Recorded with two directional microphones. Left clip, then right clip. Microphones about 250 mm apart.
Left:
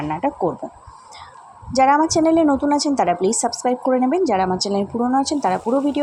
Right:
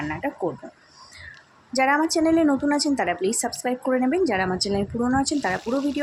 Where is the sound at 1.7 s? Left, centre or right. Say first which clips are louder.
Left 6 dB; centre.